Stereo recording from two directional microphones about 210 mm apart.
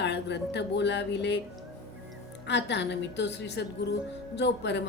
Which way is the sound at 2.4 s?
55° left (ahead or behind).